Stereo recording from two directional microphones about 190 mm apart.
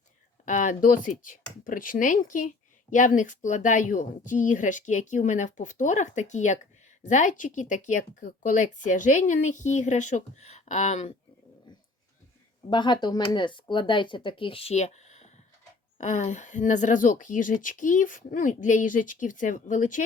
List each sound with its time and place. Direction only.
0.4 s speech: 40° left (ahead or behind)
12.7 s speech: 25° left (ahead or behind); by 20.0 s 40° left (ahead or behind)